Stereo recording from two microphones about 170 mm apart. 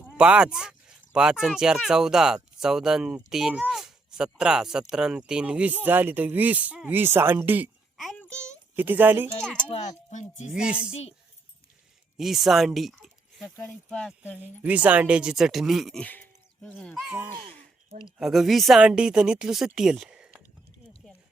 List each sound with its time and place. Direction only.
0.2 s speech: 5° right (ahead or behind)
7.9 s a sound: centre (ahead or behind)
8.7 s speech: 10° right (ahead or behind)
10.1 s speech: 45° left (ahead or behind)
10.5 s speech: 5° right (ahead or behind)
12.1 s speech: centre (ahead or behind)
14.3 s speech: 10° right (ahead or behind); by 17.0 s 10° left (ahead or behind)
17.1 s speech: 15° right (ahead or behind)
18.2 s speech: centre (ahead or behind)